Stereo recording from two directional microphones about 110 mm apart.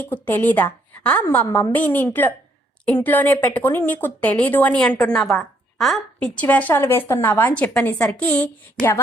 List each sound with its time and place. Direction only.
0.0 s a woman's voice: 20° left (ahead or behind)
5.4 s a sound: centre (ahead or behind)
6.1 s a woman's voice: 10° left (ahead or behind)